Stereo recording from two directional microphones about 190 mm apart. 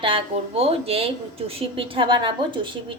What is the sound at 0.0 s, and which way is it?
A woman's voice, 30° right (ahead or behind).